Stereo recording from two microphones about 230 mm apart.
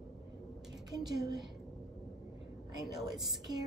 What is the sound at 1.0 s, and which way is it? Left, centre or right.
Speech, centre.